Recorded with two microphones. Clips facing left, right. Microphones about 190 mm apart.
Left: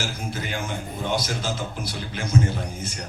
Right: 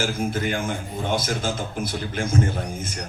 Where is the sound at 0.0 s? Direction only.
50° right (ahead or behind).